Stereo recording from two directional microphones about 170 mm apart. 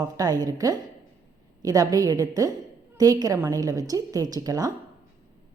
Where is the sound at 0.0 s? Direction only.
20° right (ahead or behind).